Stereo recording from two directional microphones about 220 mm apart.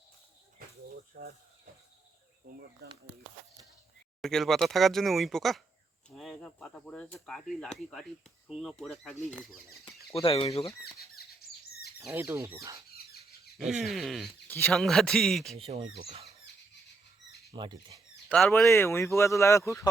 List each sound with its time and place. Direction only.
0.9 s a sound: 40° right (ahead or behind)
4.2 s speech: centre (ahead or behind)
10.2 s speech: 25° left (ahead or behind)
10.9 s a sound: 45° left (ahead or behind)
11.9 s speech: 5° right (ahead or behind)
12.9 s a sound: 45° left (ahead or behind)
13.8 s speech: centre (ahead or behind)
15.5 s speech: 25° right (ahead or behind)
17.5 s speech: 20° right (ahead or behind)
18.3 s speech: 5° left (ahead or behind)